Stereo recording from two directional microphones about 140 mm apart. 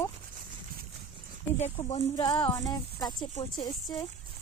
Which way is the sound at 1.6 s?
50° left (ahead or behind).